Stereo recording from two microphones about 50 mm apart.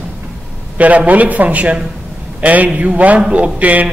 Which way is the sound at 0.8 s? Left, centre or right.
Right.